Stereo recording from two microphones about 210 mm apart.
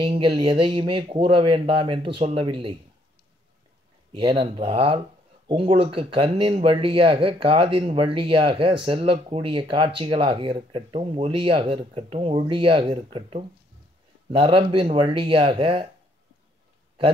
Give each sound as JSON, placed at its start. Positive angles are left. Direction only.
{"t": 0.0, "sound": "speech", "side_deg": -25}
{"t": 4.1, "sound": "speech", "side_deg": -25}